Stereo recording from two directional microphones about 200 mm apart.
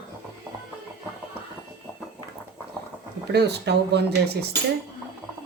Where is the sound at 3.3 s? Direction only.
55° right (ahead or behind).